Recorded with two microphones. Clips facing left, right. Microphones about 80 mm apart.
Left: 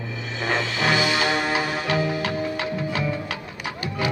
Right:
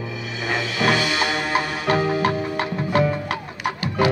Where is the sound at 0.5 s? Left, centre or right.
Centre.